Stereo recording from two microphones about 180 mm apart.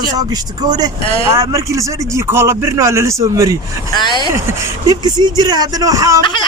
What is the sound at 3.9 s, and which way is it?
Speech, 25° left (ahead or behind).